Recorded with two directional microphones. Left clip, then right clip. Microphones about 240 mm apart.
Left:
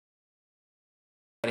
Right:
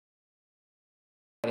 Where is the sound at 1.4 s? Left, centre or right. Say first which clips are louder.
Left 1 dB; centre.